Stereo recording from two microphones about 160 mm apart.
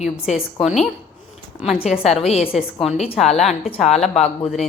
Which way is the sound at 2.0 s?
40° left (ahead or behind).